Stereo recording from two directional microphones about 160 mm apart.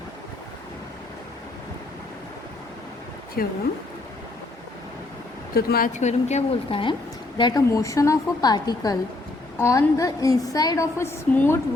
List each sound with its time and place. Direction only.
3.4 s speech: 65° left (ahead or behind)
5.5 s a woman's voice: 70° left (ahead or behind)
5.9 s a woman's voice: 45° left (ahead or behind); by 11.6 s 15° left (ahead or behind)